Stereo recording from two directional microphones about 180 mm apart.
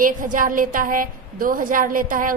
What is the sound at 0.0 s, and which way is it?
A woman's voice, 50° right (ahead or behind).